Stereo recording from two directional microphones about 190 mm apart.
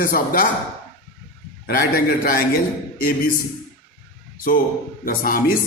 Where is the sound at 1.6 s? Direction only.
50° left (ahead or behind).